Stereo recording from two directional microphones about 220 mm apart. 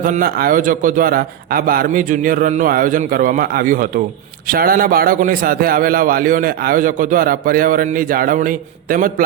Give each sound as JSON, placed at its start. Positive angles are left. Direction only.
{"t": 0.0, "sound": "a man's voice", "side_deg": -40}